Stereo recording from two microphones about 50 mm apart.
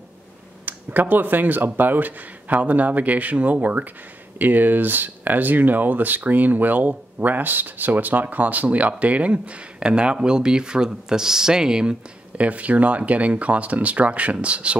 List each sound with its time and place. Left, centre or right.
0.7 s speech: right